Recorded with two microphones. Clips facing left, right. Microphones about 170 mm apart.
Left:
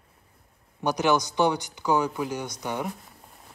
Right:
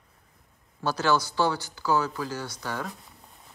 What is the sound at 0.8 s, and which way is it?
A man's voice, 20° left (ahead or behind).